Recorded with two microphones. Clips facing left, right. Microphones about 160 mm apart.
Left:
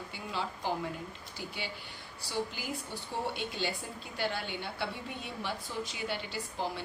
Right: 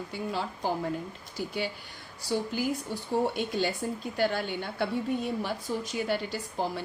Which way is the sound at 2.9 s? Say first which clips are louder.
Right 8 dB; 45° right (ahead or behind).